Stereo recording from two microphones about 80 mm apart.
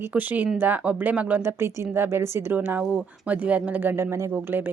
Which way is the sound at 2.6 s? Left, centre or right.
Centre.